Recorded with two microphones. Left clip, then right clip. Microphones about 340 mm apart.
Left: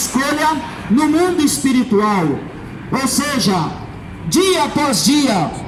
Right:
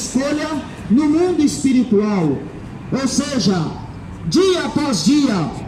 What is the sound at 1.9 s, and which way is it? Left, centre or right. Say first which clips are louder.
A man's voice: left 2 dB; centre.